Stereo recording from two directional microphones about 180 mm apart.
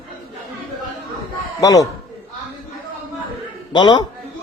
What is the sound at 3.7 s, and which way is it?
Speech, 25° left (ahead or behind).